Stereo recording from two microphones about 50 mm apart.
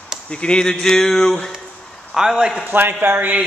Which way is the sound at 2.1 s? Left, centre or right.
Centre.